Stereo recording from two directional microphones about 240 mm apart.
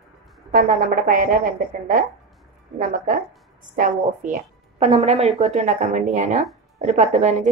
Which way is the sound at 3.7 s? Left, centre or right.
Right.